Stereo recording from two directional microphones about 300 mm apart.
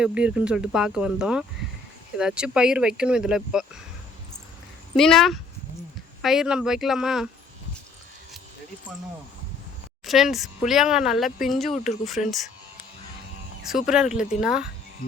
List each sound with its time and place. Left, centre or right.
0.0 s speech: centre
4.9 s speech: centre
10.1 s speech: centre
11.7 s speech: left
13.7 s speech: centre